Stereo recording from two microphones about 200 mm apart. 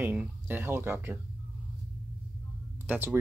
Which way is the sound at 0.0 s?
10° right (ahead or behind).